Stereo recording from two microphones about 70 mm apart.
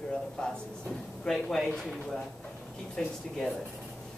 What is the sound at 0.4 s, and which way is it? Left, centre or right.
Speech, centre.